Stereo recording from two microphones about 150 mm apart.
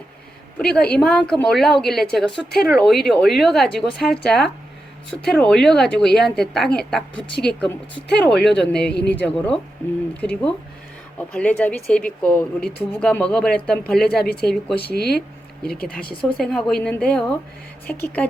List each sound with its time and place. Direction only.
0.6 s a woman's voice: 10° left (ahead or behind)
14.0 s a woman's voice: 90° left
14.4 s a woman's voice: centre (ahead or behind)
14.8 s a woman's voice: 90° left
15.9 s a woman's voice: 5° left (ahead or behind)